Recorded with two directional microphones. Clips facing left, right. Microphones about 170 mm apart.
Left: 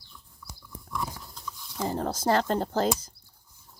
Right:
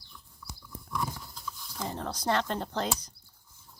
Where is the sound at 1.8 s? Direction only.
35° left (ahead or behind).